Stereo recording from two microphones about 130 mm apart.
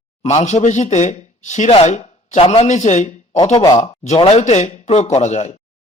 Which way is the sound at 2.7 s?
65° left (ahead or behind).